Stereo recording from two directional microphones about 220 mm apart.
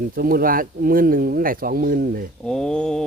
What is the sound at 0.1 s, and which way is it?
Speech, 40° right (ahead or behind).